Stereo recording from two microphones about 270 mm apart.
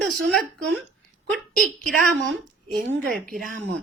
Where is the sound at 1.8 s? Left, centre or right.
Right.